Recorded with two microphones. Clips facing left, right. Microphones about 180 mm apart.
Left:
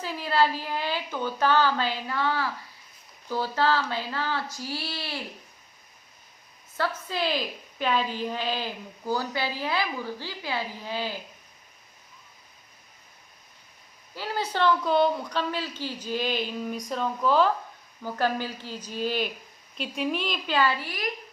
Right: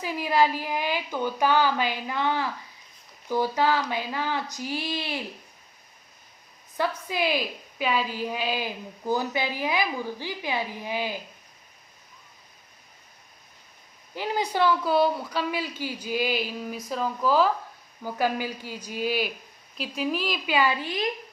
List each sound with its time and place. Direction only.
0.0 s a woman's voice: 15° right (ahead or behind)
6.7 s a woman's voice: 15° right (ahead or behind)
14.2 s a woman's voice: 15° right (ahead or behind)